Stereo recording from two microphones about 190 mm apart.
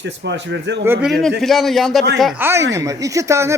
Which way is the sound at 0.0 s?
70° right (ahead or behind).